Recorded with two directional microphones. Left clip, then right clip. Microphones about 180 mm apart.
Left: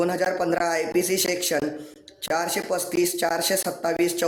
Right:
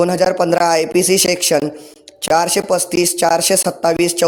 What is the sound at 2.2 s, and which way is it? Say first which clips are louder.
A man's voice: right 11 dB; 40° right (ahead or behind).